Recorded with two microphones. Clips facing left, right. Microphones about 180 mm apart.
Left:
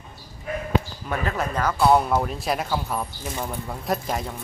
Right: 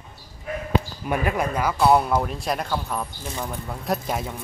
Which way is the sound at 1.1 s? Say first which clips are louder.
Right 3 dB; 10° right (ahead or behind).